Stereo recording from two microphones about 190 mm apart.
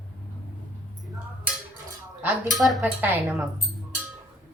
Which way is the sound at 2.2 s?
5° right (ahead or behind).